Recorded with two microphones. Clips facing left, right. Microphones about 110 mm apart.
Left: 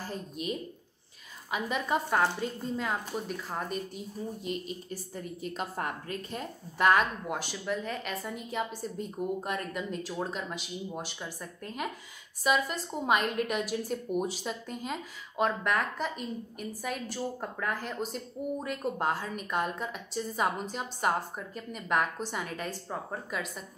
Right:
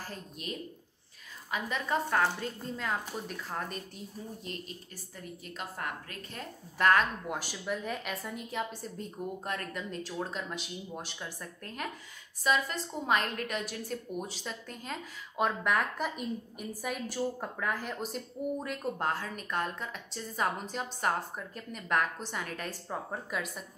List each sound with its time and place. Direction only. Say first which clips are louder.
0.1 s a woman's voice: left 6 dB; 15° left (ahead or behind)
5.1 s a woman's voice: left 5 dB; 25° left (ahead or behind)
6.3 s a woman's voice: left 4 dB; 10° left (ahead or behind)
15.3 s a woman's voice: left 1 dB; centre (ahead or behind)